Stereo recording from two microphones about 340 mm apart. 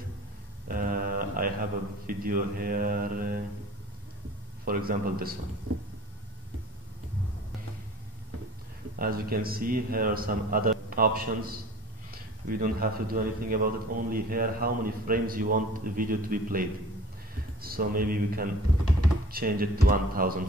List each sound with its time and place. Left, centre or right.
0.7 s mantra: right
2.0 s a man's voice: right
4.6 s a man's voice: right
8.9 s a man's voice: right